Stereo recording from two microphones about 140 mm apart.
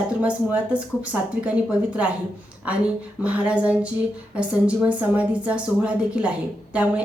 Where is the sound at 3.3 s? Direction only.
10° right (ahead or behind).